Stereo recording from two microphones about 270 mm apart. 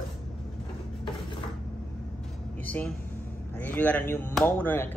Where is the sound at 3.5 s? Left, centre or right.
Centre.